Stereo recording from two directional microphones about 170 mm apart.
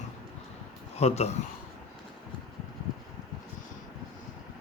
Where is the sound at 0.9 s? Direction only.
40° left (ahead or behind).